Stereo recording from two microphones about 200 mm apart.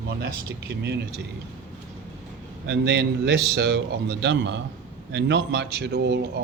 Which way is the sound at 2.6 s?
60° right (ahead or behind).